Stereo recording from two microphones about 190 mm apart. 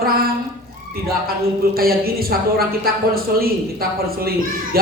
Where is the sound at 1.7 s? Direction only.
50° right (ahead or behind).